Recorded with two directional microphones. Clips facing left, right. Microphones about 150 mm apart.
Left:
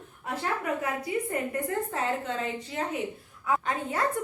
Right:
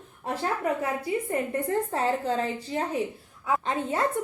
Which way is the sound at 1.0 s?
30° right (ahead or behind).